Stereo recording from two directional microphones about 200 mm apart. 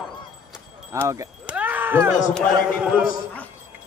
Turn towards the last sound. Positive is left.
turn(degrees=-5)  # may be behind; listen again after turning